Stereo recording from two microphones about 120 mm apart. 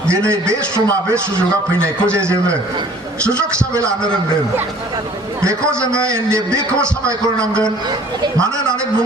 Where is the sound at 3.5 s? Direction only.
25° right (ahead or behind).